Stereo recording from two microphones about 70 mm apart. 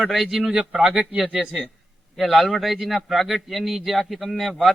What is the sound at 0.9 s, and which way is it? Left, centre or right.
A man's voice, centre.